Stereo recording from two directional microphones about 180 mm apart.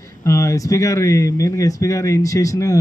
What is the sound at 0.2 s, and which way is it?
Speech, 15° left (ahead or behind).